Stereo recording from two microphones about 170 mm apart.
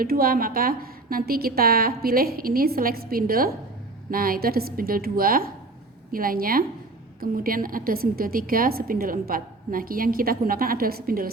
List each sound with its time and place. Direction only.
0.0 s a woman's voice: 60° right (ahead or behind)